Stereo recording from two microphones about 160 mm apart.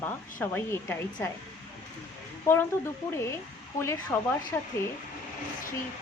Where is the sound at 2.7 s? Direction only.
20° left (ahead or behind).